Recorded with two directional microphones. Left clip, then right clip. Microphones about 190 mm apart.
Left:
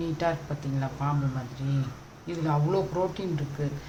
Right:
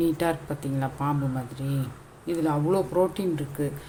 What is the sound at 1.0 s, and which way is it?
Speech, 50° right (ahead or behind).